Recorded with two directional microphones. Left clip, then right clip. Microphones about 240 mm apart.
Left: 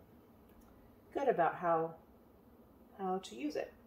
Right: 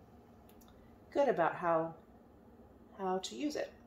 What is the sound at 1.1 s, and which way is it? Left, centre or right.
Speech, right.